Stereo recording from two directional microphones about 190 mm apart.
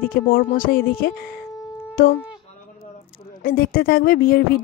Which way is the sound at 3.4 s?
50° left (ahead or behind).